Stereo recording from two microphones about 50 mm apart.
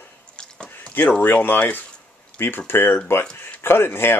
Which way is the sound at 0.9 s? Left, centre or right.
Left.